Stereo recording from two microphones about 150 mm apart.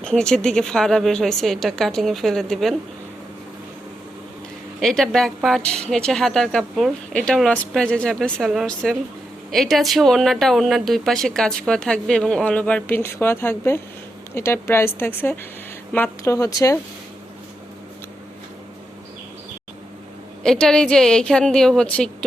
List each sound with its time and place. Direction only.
0.0 s speech: 5° left (ahead or behind)
4.8 s a woman's voice: 5° left (ahead or behind); by 16.7 s 25° left (ahead or behind)
20.4 s speech: 5° left (ahead or behind)